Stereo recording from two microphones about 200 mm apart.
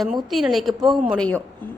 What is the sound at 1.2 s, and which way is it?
Speech, 10° left (ahead or behind).